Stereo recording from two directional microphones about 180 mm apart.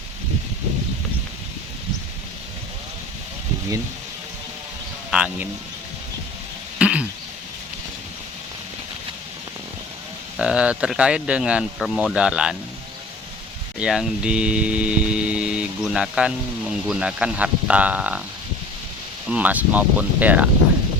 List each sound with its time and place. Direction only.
5.1 s speech: 5° right (ahead or behind)
6.7 s cough: 5° right (ahead or behind)
10.3 s hum: 5° right (ahead or behind)
13.7 s hum: 5° right (ahead or behind)
19.3 s speech: 10° right (ahead or behind)